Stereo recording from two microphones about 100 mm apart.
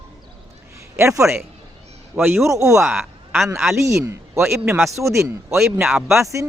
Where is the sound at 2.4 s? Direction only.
35° right (ahead or behind).